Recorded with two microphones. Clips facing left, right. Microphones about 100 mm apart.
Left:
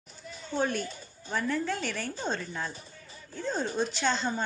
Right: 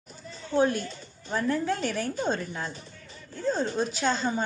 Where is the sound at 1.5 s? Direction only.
10° right (ahead or behind).